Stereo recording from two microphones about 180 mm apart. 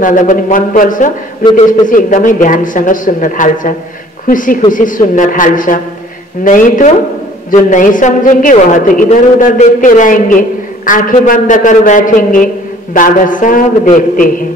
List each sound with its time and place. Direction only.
0.0 s speech: 45° left (ahead or behind)